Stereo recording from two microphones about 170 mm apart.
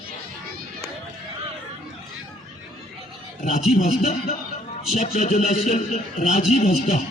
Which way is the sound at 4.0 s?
40° left (ahead or behind).